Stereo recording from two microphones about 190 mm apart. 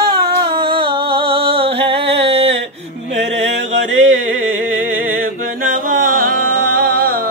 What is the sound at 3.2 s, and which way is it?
Music, 70° right (ahead or behind).